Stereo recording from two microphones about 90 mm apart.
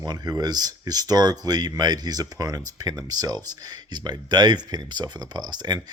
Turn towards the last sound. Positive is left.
turn(degrees=-50)  # may be behind; listen again after turning